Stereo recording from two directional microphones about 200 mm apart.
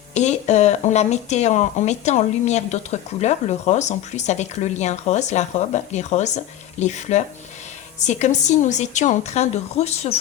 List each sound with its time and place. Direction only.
0.1 s speech: 35° left (ahead or behind)